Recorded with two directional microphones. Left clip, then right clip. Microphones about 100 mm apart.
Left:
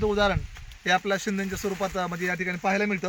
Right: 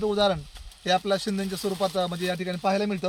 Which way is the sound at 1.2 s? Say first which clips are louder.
Even; 30° right (ahead or behind).